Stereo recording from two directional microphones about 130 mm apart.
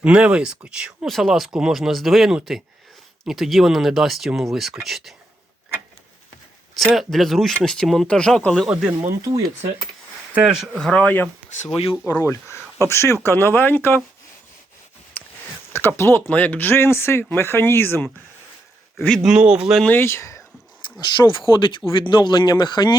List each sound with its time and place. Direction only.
0.0 s speech: 5° right (ahead or behind)
6.7 s speech: centre (ahead or behind)
8.7 s speech: 10° right (ahead or behind)
9.0 s speech: 25° right (ahead or behind)
10.3 s speech: 5° right (ahead or behind); by 11.3 s 10° left (ahead or behind)
11.6 s speech: 50° left (ahead or behind)
12.2 s speech: 20° left (ahead or behind)
15.2 s a sound: 15° left (ahead or behind)
15.7 s speech: 15° left (ahead or behind)
18.9 s speech: centre (ahead or behind)
19.8 s speech: 15° left (ahead or behind)
21.0 s speech: 35° left (ahead or behind)